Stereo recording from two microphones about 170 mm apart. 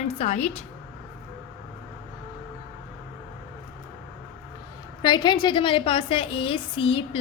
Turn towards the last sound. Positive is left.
turn(degrees=30)  # may be behind; listen again after turning